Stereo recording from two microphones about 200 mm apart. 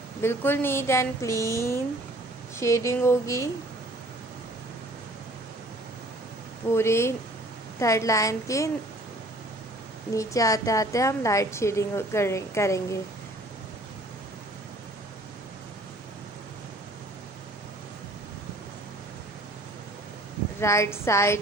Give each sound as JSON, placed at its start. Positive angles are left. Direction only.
{"t": 0.2, "sound": "a woman's voice", "side_deg": 10}
{"t": 6.7, "sound": "a woman's voice", "side_deg": 15}
{"t": 10.2, "sound": "a woman's voice", "side_deg": 15}
{"t": 20.6, "sound": "a woman's voice", "side_deg": 15}